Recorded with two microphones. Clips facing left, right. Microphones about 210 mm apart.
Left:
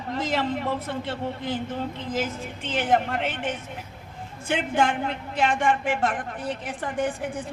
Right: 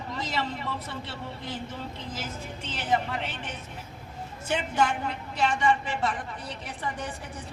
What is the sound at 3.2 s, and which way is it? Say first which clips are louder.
Speech: left 8 dB; 90° left.